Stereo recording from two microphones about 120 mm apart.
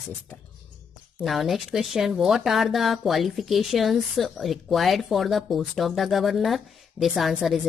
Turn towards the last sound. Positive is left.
turn(degrees=-5)  # may be behind; listen again after turning